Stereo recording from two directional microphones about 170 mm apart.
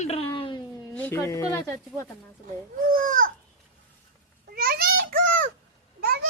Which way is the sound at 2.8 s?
55° right (ahead or behind).